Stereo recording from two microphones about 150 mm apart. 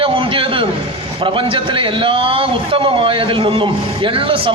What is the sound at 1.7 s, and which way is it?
A man's voice, 35° right (ahead or behind).